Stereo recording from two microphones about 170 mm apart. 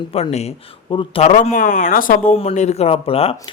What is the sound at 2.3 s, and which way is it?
Speech, 40° left (ahead or behind).